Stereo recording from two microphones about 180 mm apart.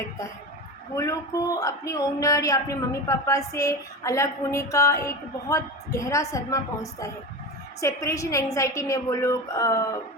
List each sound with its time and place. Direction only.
0.9 s speech: 20° left (ahead or behind)
7.8 s speech: 15° left (ahead or behind)